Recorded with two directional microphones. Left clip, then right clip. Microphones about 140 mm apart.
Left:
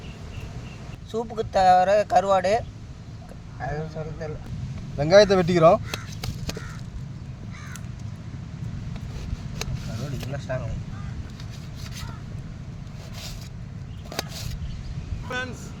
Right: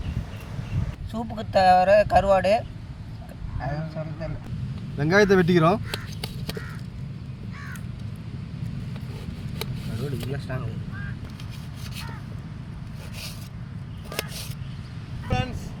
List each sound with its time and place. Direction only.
1.1 s speech: 20° left (ahead or behind)
4.9 s speech: 55° left (ahead or behind)
5.9 s vehicle: centre (ahead or behind)
10.3 s a sound: 40° left (ahead or behind)
15.3 s vehicle: 15° left (ahead or behind)